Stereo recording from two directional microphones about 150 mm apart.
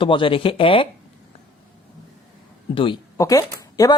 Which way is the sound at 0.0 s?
35° left (ahead or behind).